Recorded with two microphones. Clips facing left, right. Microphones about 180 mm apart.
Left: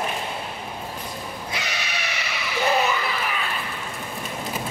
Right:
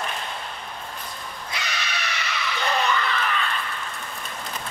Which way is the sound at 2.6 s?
10° left (ahead or behind).